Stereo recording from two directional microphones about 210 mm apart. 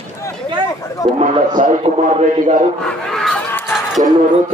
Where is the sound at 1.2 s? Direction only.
35° right (ahead or behind).